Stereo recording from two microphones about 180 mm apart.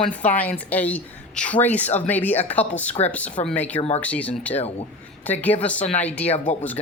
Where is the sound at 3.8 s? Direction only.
35° left (ahead or behind).